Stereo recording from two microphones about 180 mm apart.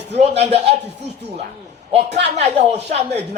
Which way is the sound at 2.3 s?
35° right (ahead or behind).